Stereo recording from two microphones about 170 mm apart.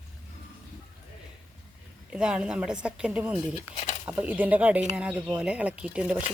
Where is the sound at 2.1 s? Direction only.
5° right (ahead or behind).